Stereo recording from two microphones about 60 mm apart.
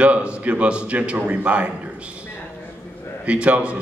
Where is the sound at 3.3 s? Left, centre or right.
Right.